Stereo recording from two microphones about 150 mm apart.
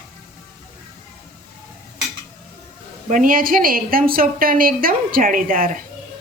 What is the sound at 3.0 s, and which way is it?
A woman's voice, 60° right (ahead or behind).